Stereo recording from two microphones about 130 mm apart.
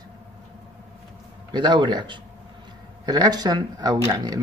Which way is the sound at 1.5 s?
35° right (ahead or behind).